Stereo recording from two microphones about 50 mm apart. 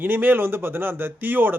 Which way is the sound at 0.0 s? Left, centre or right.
Right.